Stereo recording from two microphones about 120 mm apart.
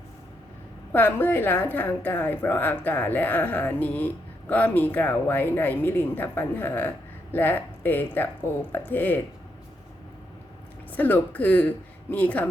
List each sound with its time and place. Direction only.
0.9 s a woman's voice: 15° left (ahead or behind)
10.9 s a woman's voice: 15° left (ahead or behind)